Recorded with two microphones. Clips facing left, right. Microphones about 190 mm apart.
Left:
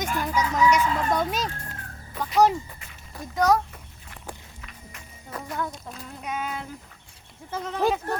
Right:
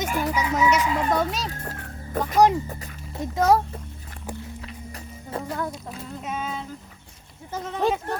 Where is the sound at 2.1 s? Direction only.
50° right (ahead or behind).